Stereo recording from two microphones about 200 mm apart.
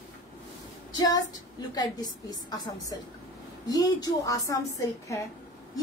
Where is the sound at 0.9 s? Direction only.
20° left (ahead or behind).